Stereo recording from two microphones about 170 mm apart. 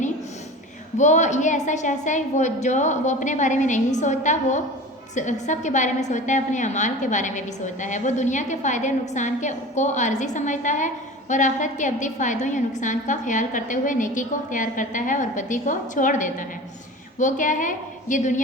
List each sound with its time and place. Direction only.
0.9 s a woman's voice: 45° left (ahead or behind)